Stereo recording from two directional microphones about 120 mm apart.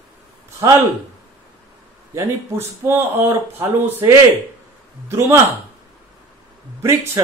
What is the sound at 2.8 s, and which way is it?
Speech, 20° right (ahead or behind).